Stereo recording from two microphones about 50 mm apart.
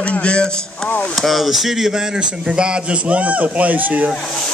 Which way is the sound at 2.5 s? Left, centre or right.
Right.